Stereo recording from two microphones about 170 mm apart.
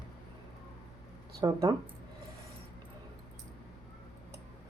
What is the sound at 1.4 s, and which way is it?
Speech, 20° right (ahead or behind).